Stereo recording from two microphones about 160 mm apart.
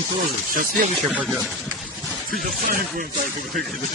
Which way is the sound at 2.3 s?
65° right (ahead or behind).